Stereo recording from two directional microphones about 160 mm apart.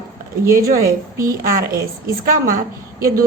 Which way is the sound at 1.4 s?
60° right (ahead or behind).